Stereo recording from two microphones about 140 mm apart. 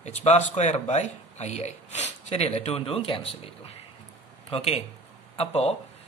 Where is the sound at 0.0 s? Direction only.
55° left (ahead or behind).